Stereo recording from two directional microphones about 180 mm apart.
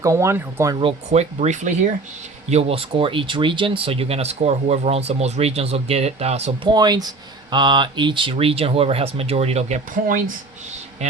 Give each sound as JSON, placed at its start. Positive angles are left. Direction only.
{"t": 0.0, "sound": "speech", "side_deg": -15}
{"t": 0.8, "sound": "speech", "side_deg": -35}
{"t": 6.7, "sound": "a man's voice", "side_deg": -20}